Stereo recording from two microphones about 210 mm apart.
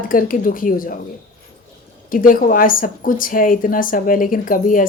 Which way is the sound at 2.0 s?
40° left (ahead or behind).